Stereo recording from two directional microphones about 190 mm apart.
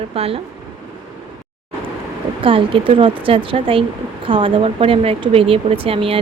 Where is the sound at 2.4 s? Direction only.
30° right (ahead or behind).